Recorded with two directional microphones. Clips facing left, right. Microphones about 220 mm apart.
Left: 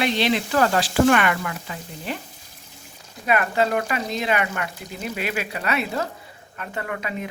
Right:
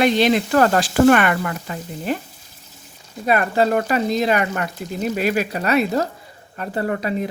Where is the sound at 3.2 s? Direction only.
35° right (ahead or behind).